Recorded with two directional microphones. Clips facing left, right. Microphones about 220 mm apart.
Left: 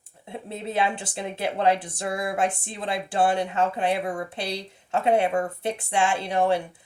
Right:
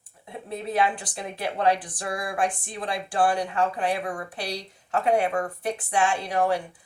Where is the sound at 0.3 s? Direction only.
25° left (ahead or behind).